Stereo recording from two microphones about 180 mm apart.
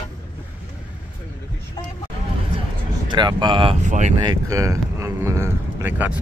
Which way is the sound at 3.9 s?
40° right (ahead or behind).